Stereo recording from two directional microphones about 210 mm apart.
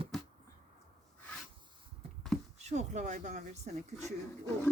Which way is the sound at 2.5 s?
30° right (ahead or behind).